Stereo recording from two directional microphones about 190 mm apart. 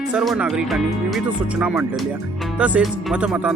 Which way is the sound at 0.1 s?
5° right (ahead or behind).